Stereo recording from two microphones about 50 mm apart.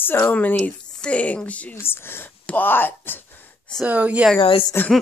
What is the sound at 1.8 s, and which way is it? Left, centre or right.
Speech, left.